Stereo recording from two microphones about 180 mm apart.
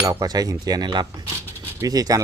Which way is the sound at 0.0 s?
20° right (ahead or behind).